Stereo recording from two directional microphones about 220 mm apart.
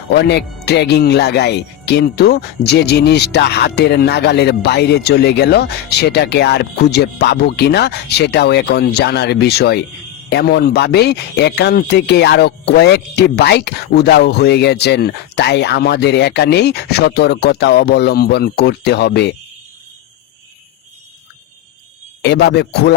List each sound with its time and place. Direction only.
0.2 s speech: 50° left (ahead or behind)
22.2 s speech: 50° left (ahead or behind)